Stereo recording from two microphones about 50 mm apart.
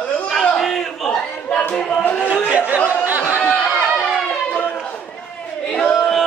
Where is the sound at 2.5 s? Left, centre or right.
Right.